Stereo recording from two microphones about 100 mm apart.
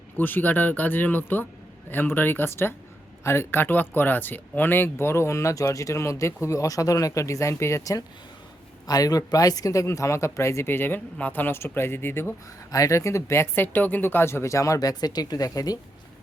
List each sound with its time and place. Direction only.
0.2 s speech: 20° left (ahead or behind)
12.7 s speech: 35° left (ahead or behind)